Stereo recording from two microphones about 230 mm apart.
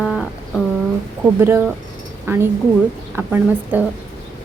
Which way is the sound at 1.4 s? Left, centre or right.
Centre.